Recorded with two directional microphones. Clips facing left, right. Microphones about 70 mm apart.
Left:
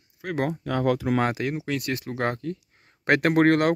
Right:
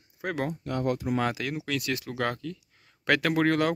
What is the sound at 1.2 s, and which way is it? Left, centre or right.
Speech, left.